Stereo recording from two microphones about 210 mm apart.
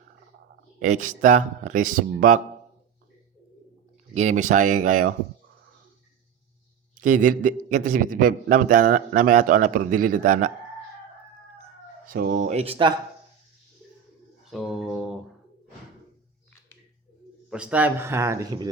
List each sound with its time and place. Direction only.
0.8 s a man's voice: 35° right (ahead or behind)
4.1 s a man's voice: 35° right (ahead or behind)
7.0 s a man's voice: 40° right (ahead or behind)
12.0 s a man's voice: 40° right (ahead or behind); by 12.9 s 25° right (ahead or behind)
14.4 s speech: centre (ahead or behind)
17.5 s speech: 5° right (ahead or behind)